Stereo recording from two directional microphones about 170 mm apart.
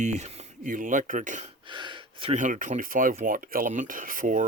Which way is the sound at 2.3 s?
50° right (ahead or behind).